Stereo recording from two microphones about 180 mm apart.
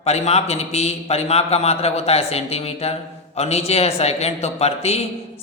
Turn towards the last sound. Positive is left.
turn(degrees=35)  # may be behind; listen again after turning